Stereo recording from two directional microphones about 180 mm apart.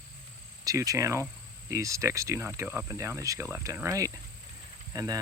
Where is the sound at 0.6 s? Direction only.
20° right (ahead or behind).